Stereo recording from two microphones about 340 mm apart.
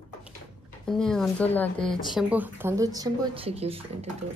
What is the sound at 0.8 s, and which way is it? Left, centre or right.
Speech, centre.